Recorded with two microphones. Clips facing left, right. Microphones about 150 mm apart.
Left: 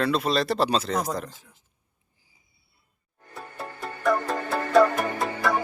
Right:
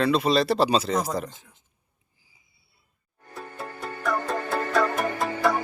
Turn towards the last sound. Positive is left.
turn(degrees=0)  # may be behind; listen again after turning